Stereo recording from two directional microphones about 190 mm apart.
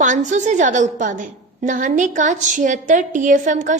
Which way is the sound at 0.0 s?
40° right (ahead or behind).